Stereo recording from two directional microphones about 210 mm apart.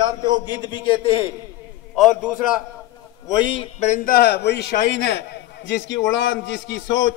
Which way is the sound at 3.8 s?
35° left (ahead or behind).